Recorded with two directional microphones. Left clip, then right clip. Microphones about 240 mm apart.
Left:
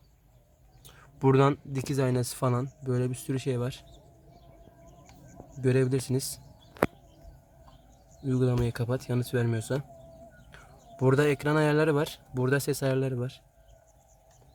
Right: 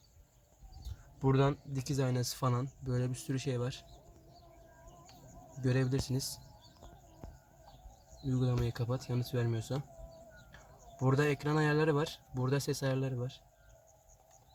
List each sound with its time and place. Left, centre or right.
1.2 s speech: left
5.6 s speech: left
8.3 s speech: left
11.0 s speech: left